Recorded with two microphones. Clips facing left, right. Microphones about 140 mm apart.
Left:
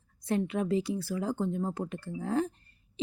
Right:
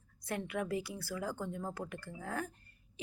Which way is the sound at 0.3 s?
25° left (ahead or behind).